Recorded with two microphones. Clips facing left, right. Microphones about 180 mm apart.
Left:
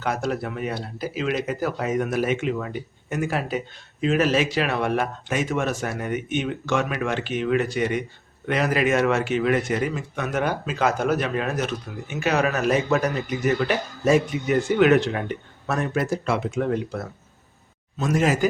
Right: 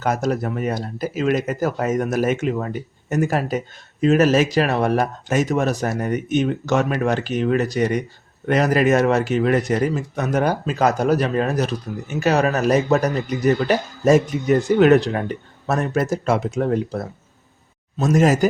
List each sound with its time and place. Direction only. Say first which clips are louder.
0.0 s speech: right 4 dB; 40° right (ahead or behind)